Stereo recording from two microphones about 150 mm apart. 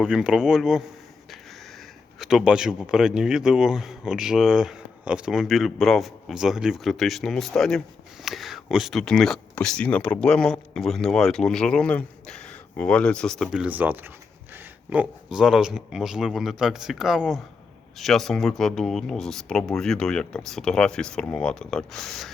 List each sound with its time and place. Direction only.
0.0 s speech: 5° right (ahead or behind)
2.1 s speech: 5° right (ahead or behind)